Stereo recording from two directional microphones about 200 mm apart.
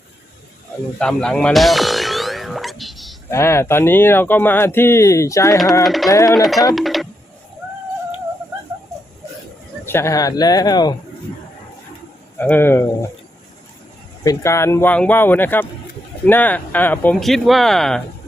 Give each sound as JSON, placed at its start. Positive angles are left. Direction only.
{"t": 0.9, "sound": "music", "side_deg": 5}
{"t": 3.2, "sound": "speech", "side_deg": 15}
{"t": 5.8, "sound": "speech", "side_deg": 0}
{"t": 6.1, "sound": "speech", "side_deg": 15}
{"t": 6.7, "sound": "a sound", "side_deg": 0}
{"t": 9.8, "sound": "speech", "side_deg": 10}
{"t": 12.4, "sound": "speech", "side_deg": 10}
{"t": 14.3, "sound": "speech", "side_deg": 15}